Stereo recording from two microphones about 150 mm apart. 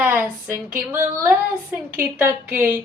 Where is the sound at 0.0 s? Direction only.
10° right (ahead or behind).